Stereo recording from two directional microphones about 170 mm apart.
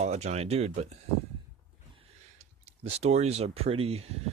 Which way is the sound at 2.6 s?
40° right (ahead or behind).